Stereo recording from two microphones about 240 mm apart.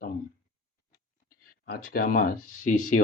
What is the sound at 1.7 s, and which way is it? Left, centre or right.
Speech, left.